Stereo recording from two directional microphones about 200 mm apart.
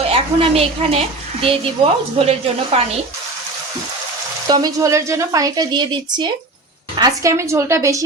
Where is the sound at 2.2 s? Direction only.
30° right (ahead or behind).